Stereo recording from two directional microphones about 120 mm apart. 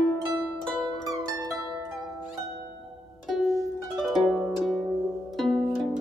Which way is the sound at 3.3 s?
Centre (ahead or behind).